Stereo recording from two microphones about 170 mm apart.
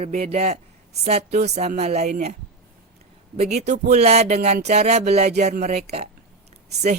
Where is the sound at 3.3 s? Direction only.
40° right (ahead or behind).